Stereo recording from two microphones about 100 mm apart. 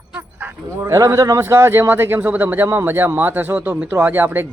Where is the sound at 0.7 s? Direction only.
30° right (ahead or behind).